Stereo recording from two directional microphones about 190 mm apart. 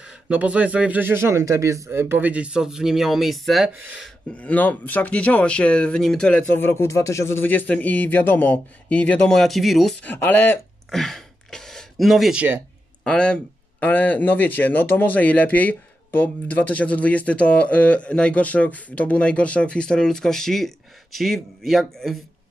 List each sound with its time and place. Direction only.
0.0 s speech: 5° right (ahead or behind)
4.4 s speech: 10° left (ahead or behind); by 12.6 s 10° right (ahead or behind)
13.0 s speech: 5° left (ahead or behind)